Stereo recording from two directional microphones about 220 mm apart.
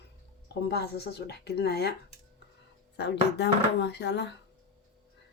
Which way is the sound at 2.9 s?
50° left (ahead or behind).